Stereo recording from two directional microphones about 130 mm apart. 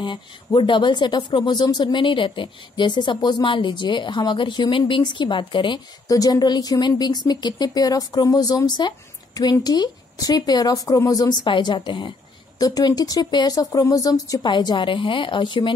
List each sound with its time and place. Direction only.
0.0 s speech: 40° left (ahead or behind)
11.4 s speech: 40° left (ahead or behind)